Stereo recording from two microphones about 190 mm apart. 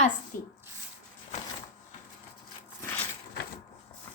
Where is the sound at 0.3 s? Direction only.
45° left (ahead or behind).